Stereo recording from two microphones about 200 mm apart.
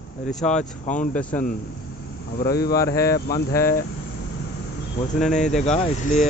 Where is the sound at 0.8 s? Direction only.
40° left (ahead or behind).